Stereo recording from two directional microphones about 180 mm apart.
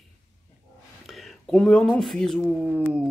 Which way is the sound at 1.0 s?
Centre (ahead or behind).